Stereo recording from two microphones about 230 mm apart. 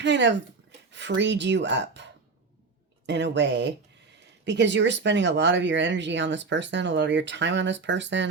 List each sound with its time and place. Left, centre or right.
0.0 s speech: right
3.1 s speech: right